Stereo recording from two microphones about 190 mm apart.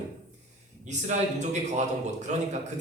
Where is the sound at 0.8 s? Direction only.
40° right (ahead or behind).